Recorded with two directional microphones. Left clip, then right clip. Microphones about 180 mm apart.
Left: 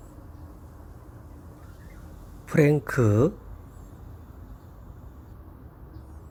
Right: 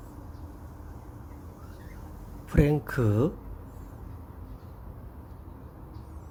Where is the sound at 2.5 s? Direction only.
20° left (ahead or behind).